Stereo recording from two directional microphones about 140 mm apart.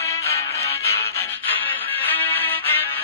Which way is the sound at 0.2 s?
20° left (ahead or behind).